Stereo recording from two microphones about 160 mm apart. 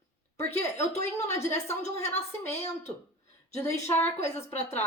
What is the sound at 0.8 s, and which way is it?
A woman's voice, 45° left (ahead or behind).